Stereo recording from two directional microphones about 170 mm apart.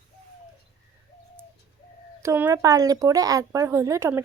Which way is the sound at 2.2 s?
15° right (ahead or behind).